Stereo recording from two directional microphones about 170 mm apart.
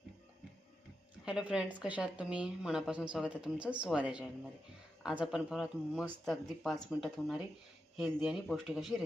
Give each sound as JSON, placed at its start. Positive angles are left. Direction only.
{"t": 1.2, "sound": "a woman's voice", "side_deg": -5}